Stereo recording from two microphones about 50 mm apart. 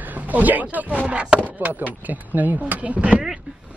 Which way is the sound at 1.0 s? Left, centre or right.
Right.